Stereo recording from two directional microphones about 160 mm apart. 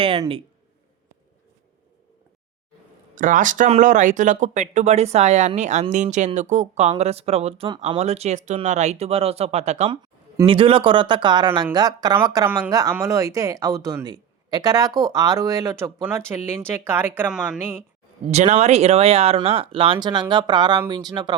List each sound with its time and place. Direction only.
0.0 s speech: 35° right (ahead or behind)
3.2 s speech: 55° right (ahead or behind)
10.4 s speech: 35° right (ahead or behind); by 17.7 s 10° right (ahead or behind)
18.3 s speech: 45° right (ahead or behind); by 21.3 s 25° right (ahead or behind)